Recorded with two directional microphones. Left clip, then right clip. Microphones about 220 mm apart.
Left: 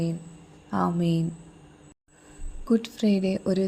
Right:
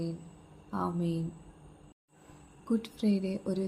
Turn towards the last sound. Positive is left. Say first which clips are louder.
# left 8 dB
turn(degrees=35)  # may be behind; listen again after turning